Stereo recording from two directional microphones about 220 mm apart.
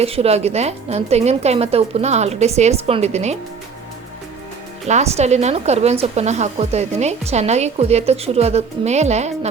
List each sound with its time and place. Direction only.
0.0 s a woman's voice: 25° right (ahead or behind)
4.9 s a woman's voice: 30° right (ahead or behind)